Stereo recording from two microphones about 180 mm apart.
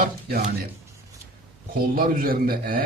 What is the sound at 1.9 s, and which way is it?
Speech, 55° right (ahead or behind).